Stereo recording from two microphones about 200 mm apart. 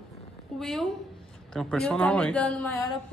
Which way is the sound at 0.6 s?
Centre (ahead or behind).